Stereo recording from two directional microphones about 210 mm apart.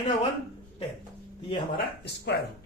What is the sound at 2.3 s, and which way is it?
Speech, 55° left (ahead or behind).